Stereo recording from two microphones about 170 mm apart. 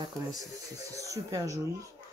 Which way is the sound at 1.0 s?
20° right (ahead or behind).